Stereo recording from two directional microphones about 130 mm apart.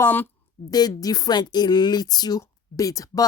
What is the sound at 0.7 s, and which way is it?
Speech, 30° left (ahead or behind).